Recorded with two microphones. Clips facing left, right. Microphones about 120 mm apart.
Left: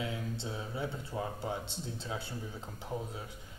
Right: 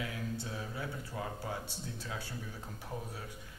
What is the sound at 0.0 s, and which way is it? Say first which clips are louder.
Speech: left 2 dB; 25° left (ahead or behind).